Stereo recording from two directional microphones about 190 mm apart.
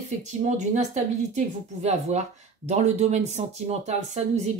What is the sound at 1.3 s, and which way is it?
Speech, 35° right (ahead or behind).